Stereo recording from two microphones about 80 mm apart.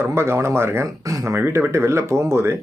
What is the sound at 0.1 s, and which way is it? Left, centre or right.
Speech, right.